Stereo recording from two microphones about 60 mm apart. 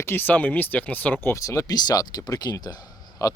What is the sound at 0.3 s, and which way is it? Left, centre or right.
Speech, left.